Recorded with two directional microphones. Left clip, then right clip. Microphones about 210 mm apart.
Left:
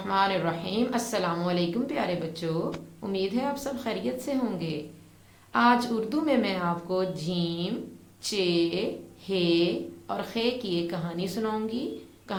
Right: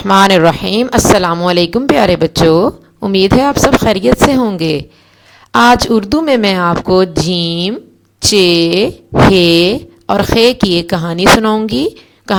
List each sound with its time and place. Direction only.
0.0 s speech: 45° right (ahead or behind)